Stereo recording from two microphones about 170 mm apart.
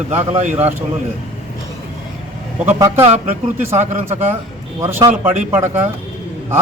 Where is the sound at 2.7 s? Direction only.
20° right (ahead or behind).